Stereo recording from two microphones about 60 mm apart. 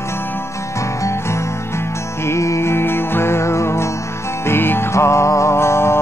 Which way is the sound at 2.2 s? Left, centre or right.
Left.